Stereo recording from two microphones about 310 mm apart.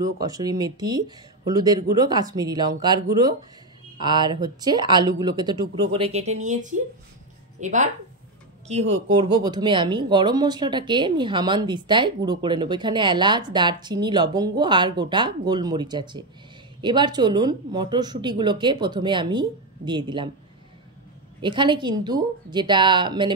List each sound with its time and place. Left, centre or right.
0.2 s speech: centre
21.4 s speech: centre